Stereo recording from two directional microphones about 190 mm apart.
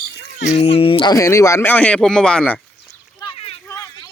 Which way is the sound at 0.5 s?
30° left (ahead or behind).